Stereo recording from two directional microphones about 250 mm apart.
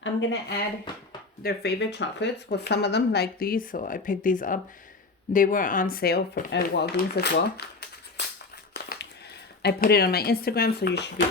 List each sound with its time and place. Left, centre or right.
0.0 s speech: left
8.7 s a sound: left
9.6 s speech: left